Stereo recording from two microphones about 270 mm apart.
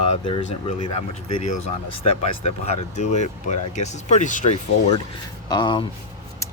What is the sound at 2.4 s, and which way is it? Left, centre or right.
Speech, left.